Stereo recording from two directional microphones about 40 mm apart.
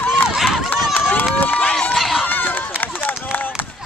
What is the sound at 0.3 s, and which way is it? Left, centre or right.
Run, centre.